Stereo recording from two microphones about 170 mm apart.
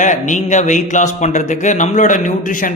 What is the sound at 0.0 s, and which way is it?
Speech, 45° left (ahead or behind).